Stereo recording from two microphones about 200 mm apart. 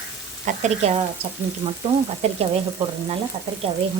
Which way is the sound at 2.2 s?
30° right (ahead or behind).